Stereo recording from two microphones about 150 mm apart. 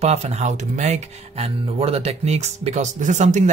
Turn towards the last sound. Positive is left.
turn(degrees=-50)  # may be behind; listen again after turning